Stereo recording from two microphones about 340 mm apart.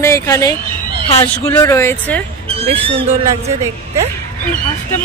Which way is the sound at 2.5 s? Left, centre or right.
Centre.